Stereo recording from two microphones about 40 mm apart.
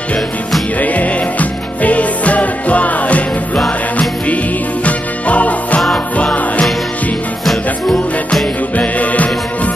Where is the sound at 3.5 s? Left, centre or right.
Centre.